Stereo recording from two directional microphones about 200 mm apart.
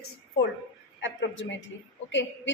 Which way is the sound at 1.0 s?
70° left (ahead or behind).